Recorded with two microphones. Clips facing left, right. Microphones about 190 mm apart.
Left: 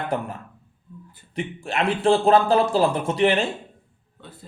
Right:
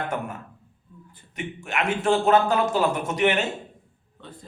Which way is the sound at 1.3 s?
30° left (ahead or behind).